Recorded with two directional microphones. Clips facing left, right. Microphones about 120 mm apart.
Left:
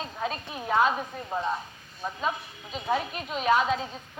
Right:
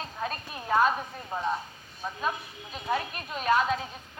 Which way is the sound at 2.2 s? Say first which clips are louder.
Left 1 dB; 20° left (ahead or behind).